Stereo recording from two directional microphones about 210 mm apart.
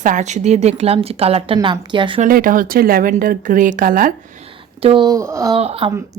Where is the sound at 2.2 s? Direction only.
40° right (ahead or behind).